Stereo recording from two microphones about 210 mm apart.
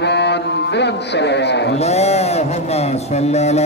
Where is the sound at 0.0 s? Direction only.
55° left (ahead or behind).